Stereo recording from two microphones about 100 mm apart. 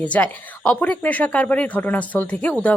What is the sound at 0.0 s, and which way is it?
A woman's voice, 15° left (ahead or behind).